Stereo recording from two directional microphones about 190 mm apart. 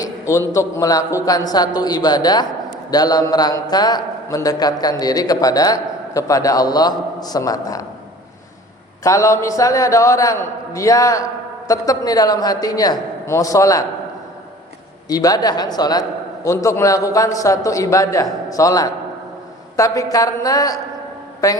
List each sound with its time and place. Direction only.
0.0 s a man's voice: 15° left (ahead or behind)
9.0 s a man's voice: 15° left (ahead or behind)
15.1 s a man's voice: 20° left (ahead or behind)